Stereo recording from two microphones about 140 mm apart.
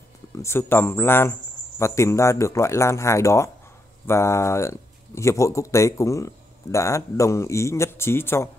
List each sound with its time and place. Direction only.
0.4 s speech: 15° left (ahead or behind)